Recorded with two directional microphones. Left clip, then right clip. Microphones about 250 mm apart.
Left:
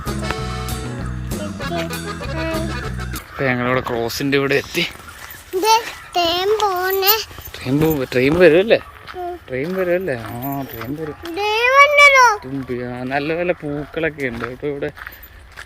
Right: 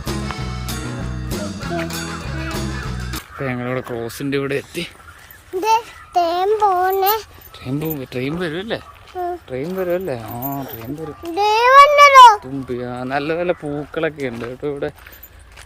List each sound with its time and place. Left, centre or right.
0.0 s music: centre
3.3 s speech: centre
5.5 s a sound: centre
6.1 s a child's voice: right
7.6 s speech: centre
8.5 s speech: centre
9.5 s speech: centre
11.3 s a sound: centre
12.8 s speech: centre